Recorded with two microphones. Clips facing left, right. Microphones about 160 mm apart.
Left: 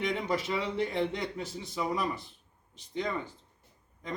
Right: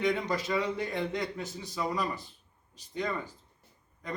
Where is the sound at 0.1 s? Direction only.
25° left (ahead or behind).